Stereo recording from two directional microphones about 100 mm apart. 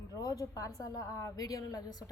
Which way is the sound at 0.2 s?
35° left (ahead or behind).